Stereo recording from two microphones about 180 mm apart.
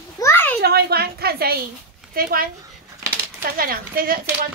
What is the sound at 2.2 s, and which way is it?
Speech, 55° right (ahead or behind).